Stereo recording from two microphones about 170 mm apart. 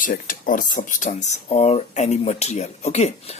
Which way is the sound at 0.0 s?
50° left (ahead or behind).